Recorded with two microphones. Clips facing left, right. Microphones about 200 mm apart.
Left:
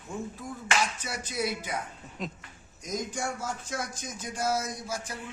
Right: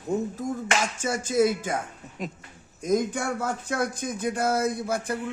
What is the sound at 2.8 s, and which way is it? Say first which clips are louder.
Speech: right 9 dB; 55° right (ahead or behind).